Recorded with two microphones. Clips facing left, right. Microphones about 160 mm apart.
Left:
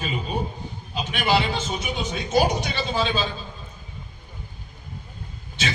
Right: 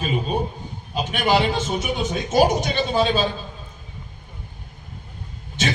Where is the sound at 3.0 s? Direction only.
45° right (ahead or behind).